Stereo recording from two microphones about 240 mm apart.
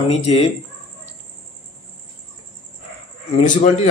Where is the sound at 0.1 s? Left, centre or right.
Left.